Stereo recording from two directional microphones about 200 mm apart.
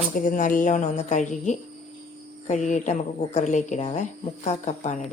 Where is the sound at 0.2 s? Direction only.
40° left (ahead or behind).